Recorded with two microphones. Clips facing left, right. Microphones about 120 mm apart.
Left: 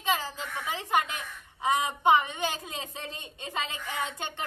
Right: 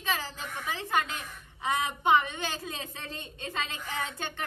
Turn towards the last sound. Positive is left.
turn(degrees=20)  # may be behind; listen again after turning